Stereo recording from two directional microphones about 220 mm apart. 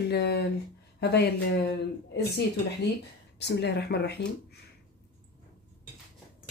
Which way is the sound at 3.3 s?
50° left (ahead or behind).